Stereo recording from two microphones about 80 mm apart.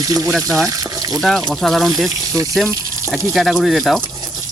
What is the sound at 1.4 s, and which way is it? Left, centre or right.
Speech, centre.